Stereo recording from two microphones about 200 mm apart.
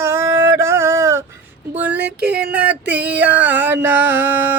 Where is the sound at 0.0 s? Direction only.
10° right (ahead or behind).